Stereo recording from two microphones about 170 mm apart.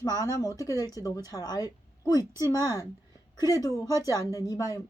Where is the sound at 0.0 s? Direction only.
20° left (ahead or behind).